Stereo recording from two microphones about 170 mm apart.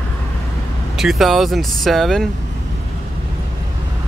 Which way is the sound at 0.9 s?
Centre (ahead or behind).